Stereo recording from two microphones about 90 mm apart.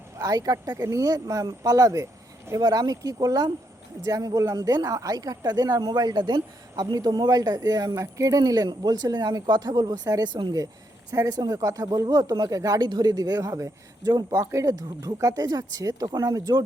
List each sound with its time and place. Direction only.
0.2 s speech: 40° right (ahead or behind)